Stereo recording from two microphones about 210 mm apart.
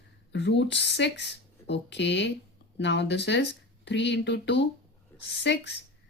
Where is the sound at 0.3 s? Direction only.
55° left (ahead or behind).